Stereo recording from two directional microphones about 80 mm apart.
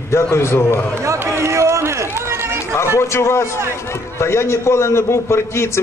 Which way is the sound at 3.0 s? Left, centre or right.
Left.